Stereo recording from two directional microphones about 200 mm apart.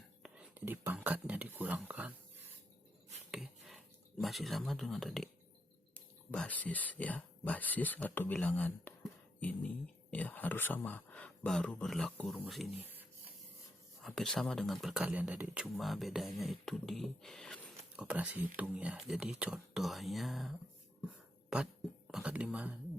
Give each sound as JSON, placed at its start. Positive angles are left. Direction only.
{"t": 0.2, "sound": "whispering", "side_deg": -5}
{"t": 3.3, "sound": "speech", "side_deg": 0}
{"t": 6.3, "sound": "speech", "side_deg": 5}
{"t": 12.8, "sound": "printer", "side_deg": -10}
{"t": 14.0, "sound": "speech", "side_deg": 0}
{"t": 21.5, "sound": "speech", "side_deg": -5}